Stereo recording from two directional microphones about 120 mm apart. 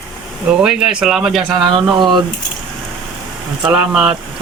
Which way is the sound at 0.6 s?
5° right (ahead or behind).